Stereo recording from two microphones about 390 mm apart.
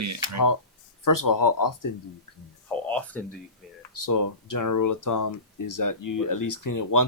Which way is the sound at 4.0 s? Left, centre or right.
Left.